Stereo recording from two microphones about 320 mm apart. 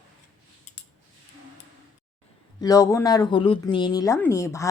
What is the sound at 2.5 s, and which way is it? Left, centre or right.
Speech, centre.